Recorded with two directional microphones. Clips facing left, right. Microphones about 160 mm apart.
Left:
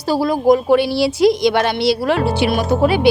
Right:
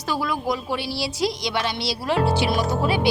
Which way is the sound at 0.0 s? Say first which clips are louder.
Left 10 dB; 35° left (ahead or behind).